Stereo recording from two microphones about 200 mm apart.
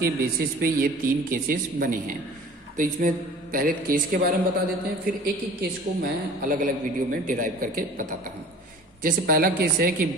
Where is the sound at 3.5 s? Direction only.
45° right (ahead or behind).